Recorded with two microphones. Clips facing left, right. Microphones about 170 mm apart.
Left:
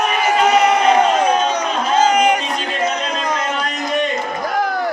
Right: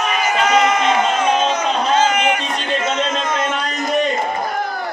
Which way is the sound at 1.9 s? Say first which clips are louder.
Left 5 dB; 35° left (ahead or behind).